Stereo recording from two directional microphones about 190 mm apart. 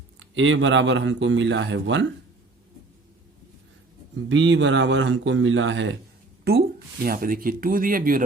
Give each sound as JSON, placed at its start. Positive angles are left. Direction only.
{"t": 0.2, "sound": "speech", "side_deg": -85}
{"t": 4.3, "sound": "speech", "side_deg": -75}
{"t": 6.4, "sound": "speech", "side_deg": -55}